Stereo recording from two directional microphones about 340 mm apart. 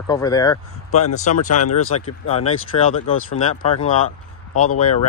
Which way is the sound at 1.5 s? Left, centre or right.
Left.